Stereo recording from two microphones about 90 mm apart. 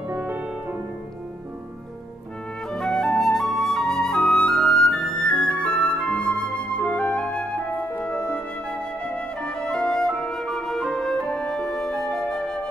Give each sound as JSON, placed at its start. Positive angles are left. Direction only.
{"t": 0.1, "sound": "music", "side_deg": -20}
{"t": 2.7, "sound": "flute", "side_deg": 5}
{"t": 7.9, "sound": "music", "side_deg": 10}